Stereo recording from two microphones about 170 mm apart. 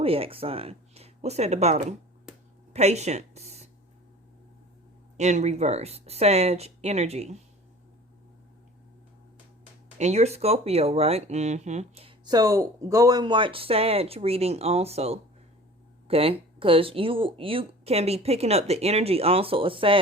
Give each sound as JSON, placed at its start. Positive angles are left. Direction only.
{"t": 0.0, "sound": "speech", "side_deg": -35}
{"t": 5.1, "sound": "speech", "side_deg": -45}
{"t": 10.0, "sound": "speech", "side_deg": -40}
{"t": 12.2, "sound": "speech", "side_deg": -20}